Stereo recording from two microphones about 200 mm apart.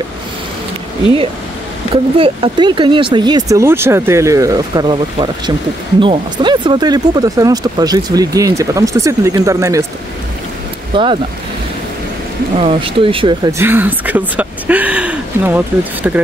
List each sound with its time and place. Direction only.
2.1 s speech: 30° right (ahead or behind)
10.9 s speech: 25° right (ahead or behind)
12.5 s speech: 25° right (ahead or behind); by 16.2 s 10° right (ahead or behind)